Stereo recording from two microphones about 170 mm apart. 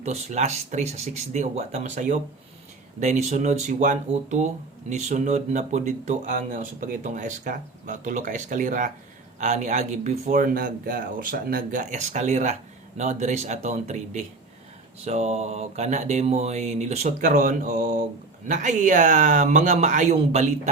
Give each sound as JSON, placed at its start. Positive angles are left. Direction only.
{"t": 0.0, "sound": "speech", "side_deg": -40}
{"t": 17.2, "sound": "speech", "side_deg": -55}